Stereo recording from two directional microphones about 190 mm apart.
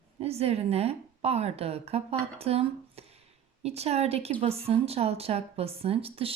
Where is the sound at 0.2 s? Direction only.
35° right (ahead or behind).